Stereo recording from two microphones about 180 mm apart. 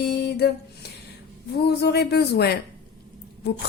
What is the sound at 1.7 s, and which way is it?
Speech, 65° left (ahead or behind).